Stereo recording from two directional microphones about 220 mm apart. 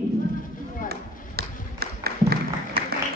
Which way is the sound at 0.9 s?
45° right (ahead or behind).